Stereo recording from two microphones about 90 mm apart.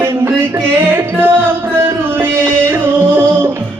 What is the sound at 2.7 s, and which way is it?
Music, 20° right (ahead or behind).